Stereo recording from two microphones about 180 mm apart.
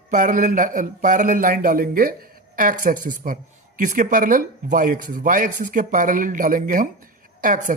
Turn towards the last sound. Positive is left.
turn(degrees=-50)  # may be behind; listen again after turning